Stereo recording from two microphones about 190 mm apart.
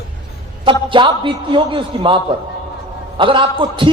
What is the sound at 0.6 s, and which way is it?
A man's voice, 25° right (ahead or behind).